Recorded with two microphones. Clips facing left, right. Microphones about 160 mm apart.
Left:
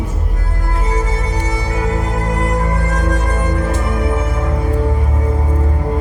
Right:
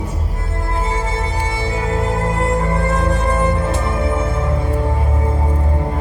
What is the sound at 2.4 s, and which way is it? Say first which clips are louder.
Music: right 1 dB; 25° right (ahead or behind).